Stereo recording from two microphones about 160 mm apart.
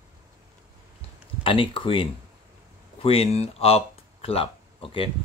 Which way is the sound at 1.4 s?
35° left (ahead or behind).